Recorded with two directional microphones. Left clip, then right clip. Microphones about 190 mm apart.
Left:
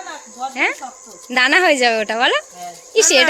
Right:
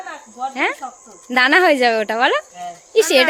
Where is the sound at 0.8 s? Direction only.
5° left (ahead or behind).